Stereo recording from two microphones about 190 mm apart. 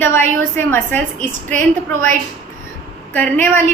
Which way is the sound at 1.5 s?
40° right (ahead or behind).